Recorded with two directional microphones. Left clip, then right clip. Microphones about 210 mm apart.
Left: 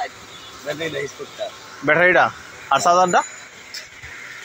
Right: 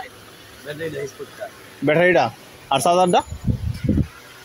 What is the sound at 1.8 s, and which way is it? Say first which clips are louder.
A man's voice: left 1 dB; 55° right (ahead or behind).